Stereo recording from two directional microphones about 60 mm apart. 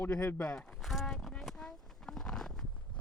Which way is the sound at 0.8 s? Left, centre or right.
Centre.